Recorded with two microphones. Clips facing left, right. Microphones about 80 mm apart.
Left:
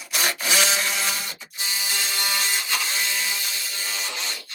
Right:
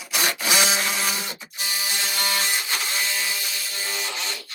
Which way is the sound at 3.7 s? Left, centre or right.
Right.